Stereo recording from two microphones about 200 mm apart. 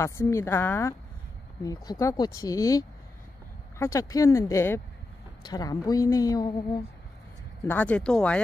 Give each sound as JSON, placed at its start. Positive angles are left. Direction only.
{"t": 0.0, "sound": "speech", "side_deg": 15}
{"t": 7.6, "sound": "speech", "side_deg": 10}